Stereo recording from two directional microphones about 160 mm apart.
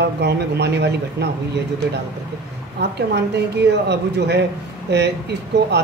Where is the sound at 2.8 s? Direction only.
90° right.